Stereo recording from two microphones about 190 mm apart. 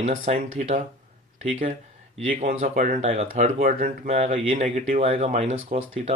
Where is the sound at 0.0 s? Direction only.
35° right (ahead or behind).